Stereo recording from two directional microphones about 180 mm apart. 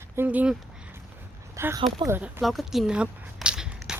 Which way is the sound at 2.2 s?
10° right (ahead or behind).